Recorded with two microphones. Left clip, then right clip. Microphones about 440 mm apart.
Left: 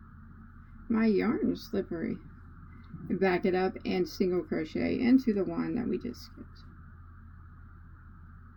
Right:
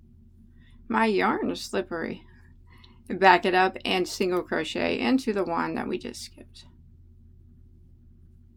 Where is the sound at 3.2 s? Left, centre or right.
Centre.